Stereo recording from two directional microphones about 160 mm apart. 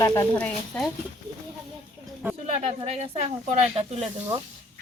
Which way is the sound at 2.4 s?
40° right (ahead or behind).